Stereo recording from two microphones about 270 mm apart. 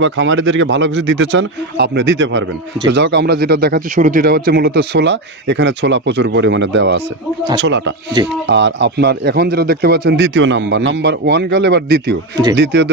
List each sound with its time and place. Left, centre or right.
0.0 s a man's voice: right